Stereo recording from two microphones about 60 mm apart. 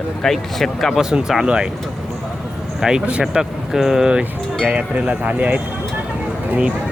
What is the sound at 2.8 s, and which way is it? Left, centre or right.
Speech, centre.